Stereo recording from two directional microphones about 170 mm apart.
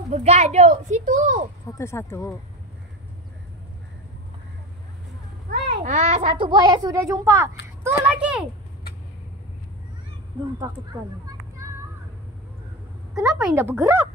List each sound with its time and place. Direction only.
0.1 s a child's voice: 40° right (ahead or behind)
1.7 s speech: 15° left (ahead or behind)
5.8 s a child's voice: 40° right (ahead or behind); by 8.5 s 5° right (ahead or behind)
10.6 s speech: 20° right (ahead or behind)
13.1 s a woman's voice: 5° right (ahead or behind)
13.6 s a child's voice: 15° right (ahead or behind)